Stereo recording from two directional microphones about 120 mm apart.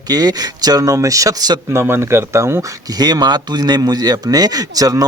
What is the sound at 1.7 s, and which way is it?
Speech, 20° right (ahead or behind).